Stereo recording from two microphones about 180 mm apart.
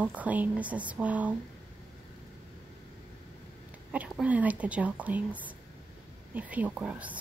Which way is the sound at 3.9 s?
5° right (ahead or behind).